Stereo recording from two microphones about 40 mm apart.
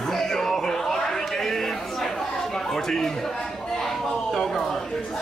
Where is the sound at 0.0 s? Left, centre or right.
Centre.